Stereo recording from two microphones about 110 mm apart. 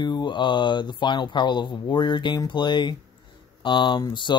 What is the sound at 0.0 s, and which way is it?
Speech, 45° left (ahead or behind).